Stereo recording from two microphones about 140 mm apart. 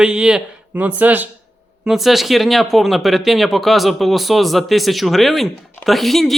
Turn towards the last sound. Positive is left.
turn(degrees=0)  # may be behind; listen again after turning